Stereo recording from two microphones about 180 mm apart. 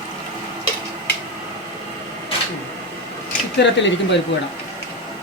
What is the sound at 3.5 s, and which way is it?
Speech, 80° left.